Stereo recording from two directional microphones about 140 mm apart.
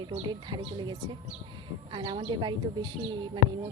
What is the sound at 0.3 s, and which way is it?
Speech, 30° right (ahead or behind).